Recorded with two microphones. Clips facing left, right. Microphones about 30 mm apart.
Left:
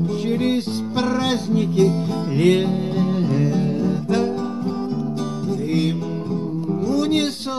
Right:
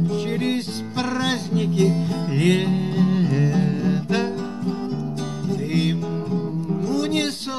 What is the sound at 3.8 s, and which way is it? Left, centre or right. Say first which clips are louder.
Music: left 2 dB; right.